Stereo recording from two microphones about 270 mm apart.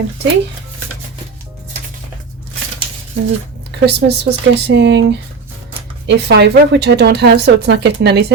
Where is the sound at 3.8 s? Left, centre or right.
Right.